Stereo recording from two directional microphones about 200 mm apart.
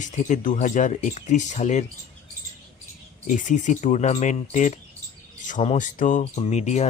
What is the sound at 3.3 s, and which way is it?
Speech, 40° left (ahead or behind).